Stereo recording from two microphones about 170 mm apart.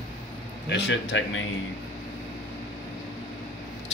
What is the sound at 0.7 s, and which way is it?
Speech, 90° left.